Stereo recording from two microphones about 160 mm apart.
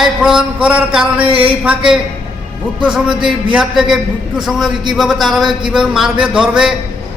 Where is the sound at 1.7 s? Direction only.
5° right (ahead or behind).